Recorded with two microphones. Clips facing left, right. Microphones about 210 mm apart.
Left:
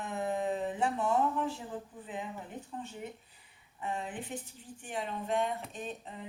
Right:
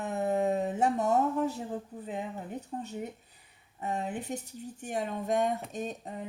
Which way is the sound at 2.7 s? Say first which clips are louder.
Right 4 dB; 40° right (ahead or behind).